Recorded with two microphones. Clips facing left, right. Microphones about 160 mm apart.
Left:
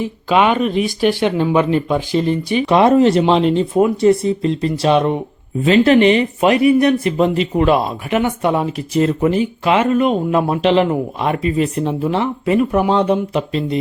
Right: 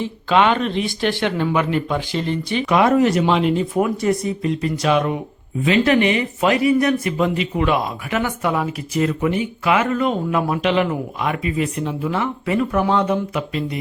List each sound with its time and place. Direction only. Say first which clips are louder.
0.0 s speech: left 2 dB; 15° left (ahead or behind)
2.6 s speech: left 4 dB; 30° left (ahead or behind)
8.1 s speech: left 5 dB; 25° left (ahead or behind)